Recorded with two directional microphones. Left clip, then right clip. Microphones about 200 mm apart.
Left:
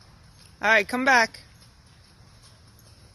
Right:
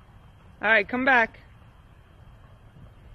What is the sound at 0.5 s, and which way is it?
Speech, 15° left (ahead or behind).